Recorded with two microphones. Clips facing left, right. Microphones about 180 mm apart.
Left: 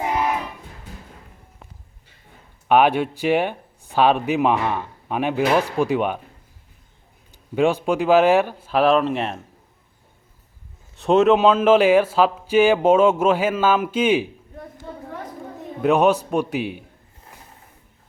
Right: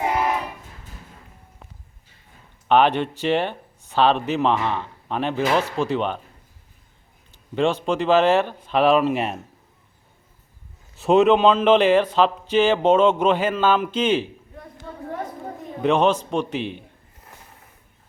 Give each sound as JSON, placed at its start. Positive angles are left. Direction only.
{"t": 2.6, "sound": "a man's voice", "side_deg": 10}
{"t": 7.5, "sound": "a man's voice", "side_deg": 10}
{"t": 10.9, "sound": "a man's voice", "side_deg": 0}
{"t": 14.9, "sound": "chatter", "side_deg": 20}
{"t": 15.8, "sound": "a man's voice", "side_deg": 5}